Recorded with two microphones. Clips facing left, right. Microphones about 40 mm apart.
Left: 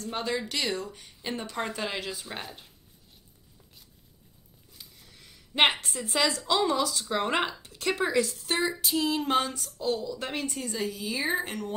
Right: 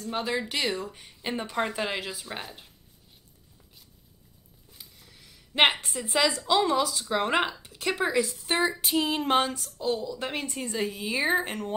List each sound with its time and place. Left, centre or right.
0.0 s speech: centre
4.7 s a sound: centre
5.5 s speech: centre
8.8 s female singing: right
9.6 s speech: centre
10.8 s female singing: right